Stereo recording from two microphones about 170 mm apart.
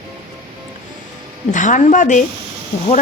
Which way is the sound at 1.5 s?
50° left (ahead or behind).